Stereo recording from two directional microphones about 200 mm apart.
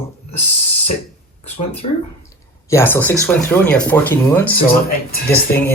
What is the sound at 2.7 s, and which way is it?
Speech, 10° left (ahead or behind).